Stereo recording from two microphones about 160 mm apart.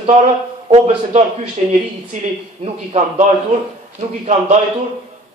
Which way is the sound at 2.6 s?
40° right (ahead or behind).